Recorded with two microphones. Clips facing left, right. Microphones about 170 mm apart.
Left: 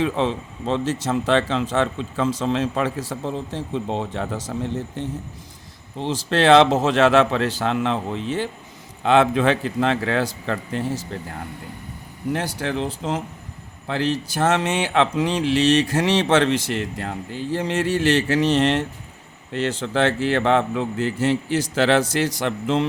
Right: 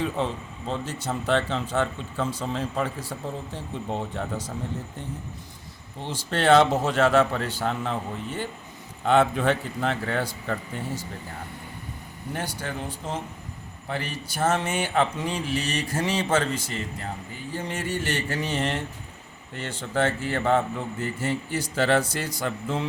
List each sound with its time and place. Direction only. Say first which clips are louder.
0.0 s speech: left 6 dB; 90° left
12.3 s speech: left 7 dB; 90° left